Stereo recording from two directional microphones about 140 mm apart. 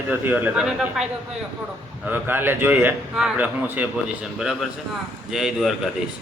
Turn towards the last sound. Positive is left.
turn(degrees=0)  # may be behind; listen again after turning